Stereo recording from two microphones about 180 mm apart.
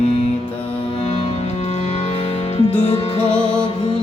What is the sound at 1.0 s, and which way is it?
Music, 35° left (ahead or behind).